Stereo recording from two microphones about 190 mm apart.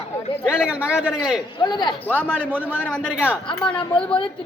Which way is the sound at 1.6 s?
20° left (ahead or behind).